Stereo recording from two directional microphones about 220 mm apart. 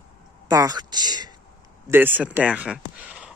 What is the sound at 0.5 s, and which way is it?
Speech, 15° right (ahead or behind).